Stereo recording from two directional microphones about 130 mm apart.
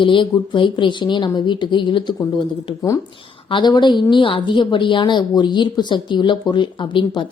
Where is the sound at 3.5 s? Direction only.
35° left (ahead or behind).